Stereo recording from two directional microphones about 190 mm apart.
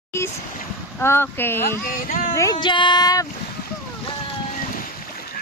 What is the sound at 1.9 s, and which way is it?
Speech, 45° left (ahead or behind).